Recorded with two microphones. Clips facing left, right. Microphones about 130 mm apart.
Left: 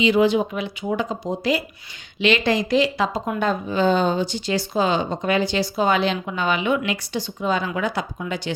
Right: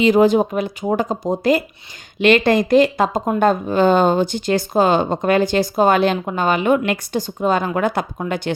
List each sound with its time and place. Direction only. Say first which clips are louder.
0.0 s speech: right 4 dB; 45° right (ahead or behind)